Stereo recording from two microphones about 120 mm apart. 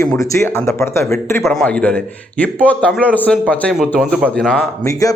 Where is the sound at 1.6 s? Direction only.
10° left (ahead or behind).